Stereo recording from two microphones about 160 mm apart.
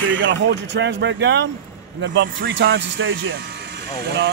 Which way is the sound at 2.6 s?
90° right.